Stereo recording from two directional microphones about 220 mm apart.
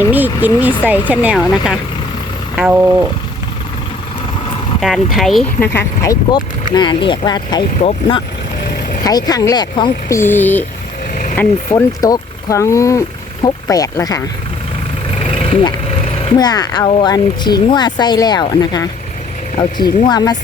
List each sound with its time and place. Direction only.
0.1 s speech: 5° right (ahead or behind)
2.6 s speech: 5° right (ahead or behind)
4.8 s speech: centre (ahead or behind); by 14.2 s 15° left (ahead or behind)
15.2 s vehicle: 25° left (ahead or behind)
16.1 s speech: 20° left (ahead or behind)